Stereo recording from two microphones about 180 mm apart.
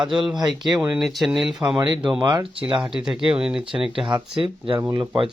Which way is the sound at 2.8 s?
5° right (ahead or behind).